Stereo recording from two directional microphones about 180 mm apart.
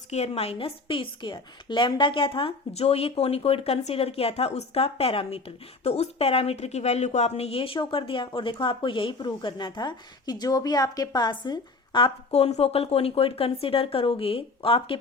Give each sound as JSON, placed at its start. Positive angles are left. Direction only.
{"t": 0.1, "sound": "a woman's voice", "side_deg": 35}